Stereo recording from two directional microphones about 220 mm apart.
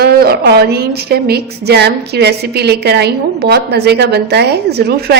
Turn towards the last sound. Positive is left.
turn(degrees=-50)  # may be behind; listen again after turning